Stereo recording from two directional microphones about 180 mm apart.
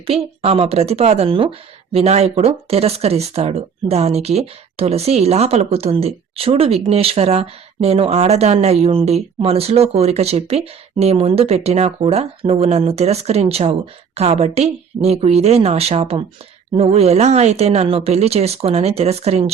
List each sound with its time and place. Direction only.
0.0 s speech: 35° right (ahead or behind)